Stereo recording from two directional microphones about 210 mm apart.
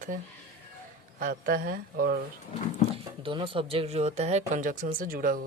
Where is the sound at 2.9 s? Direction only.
25° right (ahead or behind).